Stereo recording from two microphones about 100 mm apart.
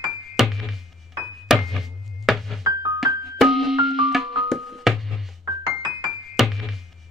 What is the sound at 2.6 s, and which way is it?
Music, 35° right (ahead or behind).